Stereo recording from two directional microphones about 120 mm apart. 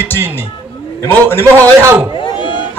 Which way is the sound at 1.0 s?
20° left (ahead or behind).